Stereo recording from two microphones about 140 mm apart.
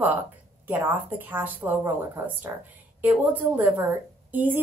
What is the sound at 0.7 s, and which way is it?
Speech, 15° right (ahead or behind).